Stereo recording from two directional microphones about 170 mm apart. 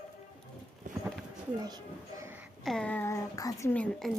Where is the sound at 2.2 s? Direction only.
10° right (ahead or behind).